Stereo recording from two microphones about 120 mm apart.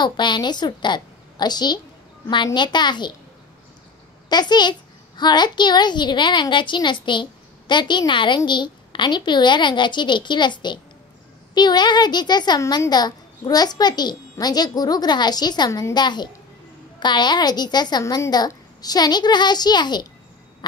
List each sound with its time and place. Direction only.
0.0 s a woman's voice: 40° left (ahead or behind)
4.3 s a woman's voice: 35° left (ahead or behind)